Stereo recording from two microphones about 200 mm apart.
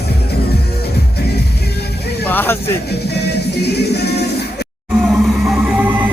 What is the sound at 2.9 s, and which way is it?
Music, 55° left (ahead or behind).